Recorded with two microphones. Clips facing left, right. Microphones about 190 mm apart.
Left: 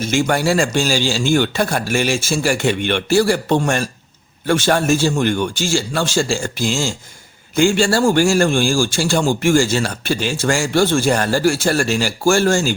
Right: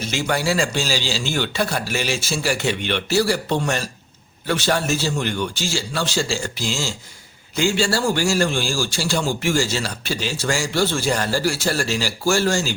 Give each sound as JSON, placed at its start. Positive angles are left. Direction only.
{"t": 0.0, "sound": "a man's voice", "side_deg": 50}